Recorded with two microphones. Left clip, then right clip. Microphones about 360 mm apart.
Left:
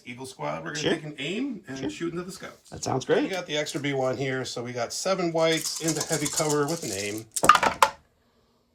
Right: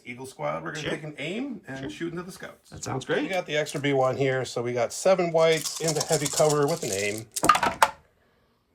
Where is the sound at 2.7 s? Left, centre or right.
Centre.